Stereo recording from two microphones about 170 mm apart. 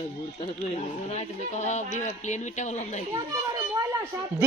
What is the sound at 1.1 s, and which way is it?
Speech, 45° left (ahead or behind).